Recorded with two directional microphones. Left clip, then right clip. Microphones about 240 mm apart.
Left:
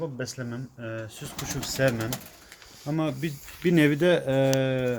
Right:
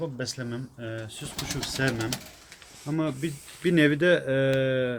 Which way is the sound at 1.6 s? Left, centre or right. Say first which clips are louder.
Left 3 dB; left.